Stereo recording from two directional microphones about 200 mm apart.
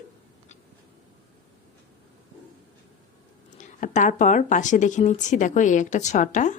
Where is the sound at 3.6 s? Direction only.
40° left (ahead or behind).